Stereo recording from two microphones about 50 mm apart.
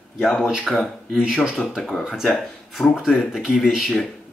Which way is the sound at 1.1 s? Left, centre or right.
Centre.